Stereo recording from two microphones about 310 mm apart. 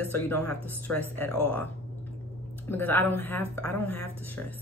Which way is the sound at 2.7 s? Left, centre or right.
Centre.